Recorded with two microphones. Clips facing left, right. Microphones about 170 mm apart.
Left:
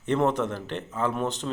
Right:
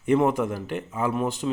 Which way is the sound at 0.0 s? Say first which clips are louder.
Right 3 dB; 10° right (ahead or behind).